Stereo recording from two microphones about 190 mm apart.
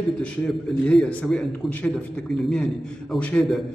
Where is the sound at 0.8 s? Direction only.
5° left (ahead or behind).